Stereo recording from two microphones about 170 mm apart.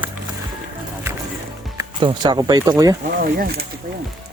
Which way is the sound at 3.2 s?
65° right (ahead or behind).